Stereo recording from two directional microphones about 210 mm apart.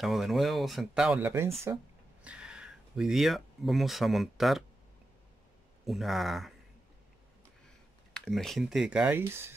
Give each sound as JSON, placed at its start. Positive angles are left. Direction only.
{"t": 0.0, "sound": "speech", "side_deg": 0}
{"t": 5.9, "sound": "speech", "side_deg": 0}
{"t": 8.1, "sound": "speech", "side_deg": 0}